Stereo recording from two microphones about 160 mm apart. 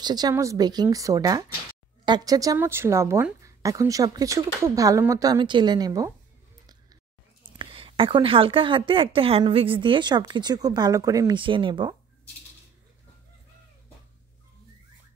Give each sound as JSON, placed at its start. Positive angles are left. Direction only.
{"t": 0.0, "sound": "a woman's voice", "side_deg": -25}
{"t": 7.5, "sound": "a woman's voice", "side_deg": -35}